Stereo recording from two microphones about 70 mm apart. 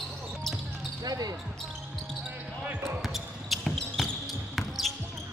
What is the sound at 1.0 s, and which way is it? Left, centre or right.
Speech, right.